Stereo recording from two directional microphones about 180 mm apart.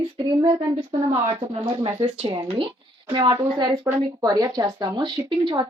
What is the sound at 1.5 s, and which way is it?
A woman's voice, 30° right (ahead or behind).